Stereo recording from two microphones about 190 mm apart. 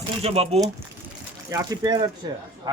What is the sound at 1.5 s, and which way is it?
Speech, 20° right (ahead or behind).